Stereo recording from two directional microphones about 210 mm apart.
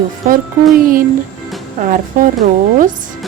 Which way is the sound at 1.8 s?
40° right (ahead or behind).